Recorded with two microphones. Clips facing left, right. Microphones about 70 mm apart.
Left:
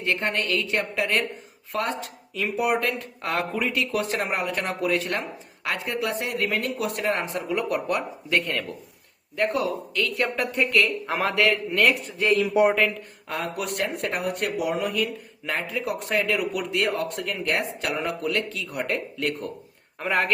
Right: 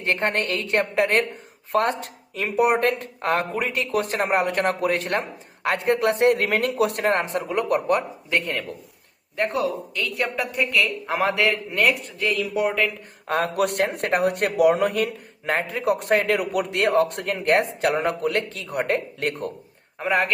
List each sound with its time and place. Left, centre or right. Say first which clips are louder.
0.0 s speech: right 3 dB; right
8.3 s speech: even; right
10.3 s speech: left 1 dB; centre
11.2 s speech: right 1 dB; right
11.9 s speech: right 1 dB; centre
12.2 s speech: left 4 dB; left
13.2 s speech: right 7 dB; right
20.0 s speech: right 2 dB; centre